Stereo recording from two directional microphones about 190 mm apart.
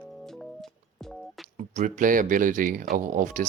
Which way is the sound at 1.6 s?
40° right (ahead or behind).